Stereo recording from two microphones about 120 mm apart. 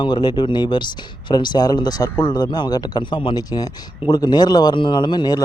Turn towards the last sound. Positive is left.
turn(degrees=35)  # may be behind; listen again after turning